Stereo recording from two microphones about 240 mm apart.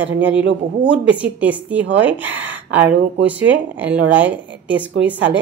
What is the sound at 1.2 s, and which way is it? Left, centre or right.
Speech, centre.